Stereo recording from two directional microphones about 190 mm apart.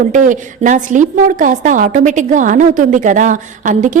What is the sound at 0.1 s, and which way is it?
A woman's voice, 45° right (ahead or behind).